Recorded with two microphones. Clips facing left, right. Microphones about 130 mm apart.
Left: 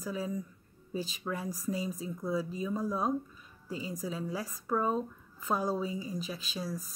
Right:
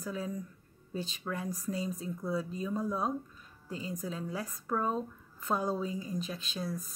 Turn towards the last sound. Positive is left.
turn(degrees=5)  # may be behind; listen again after turning